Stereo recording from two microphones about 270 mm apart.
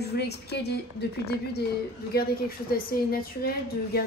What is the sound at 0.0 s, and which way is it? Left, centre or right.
Speech, left.